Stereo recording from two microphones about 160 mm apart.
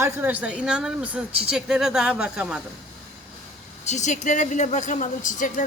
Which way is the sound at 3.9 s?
50° left (ahead or behind).